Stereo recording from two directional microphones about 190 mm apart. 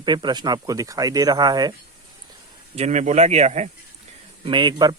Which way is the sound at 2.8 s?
35° right (ahead or behind).